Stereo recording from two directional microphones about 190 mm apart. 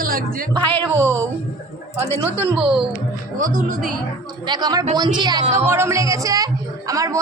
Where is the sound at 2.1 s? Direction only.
10° left (ahead or behind).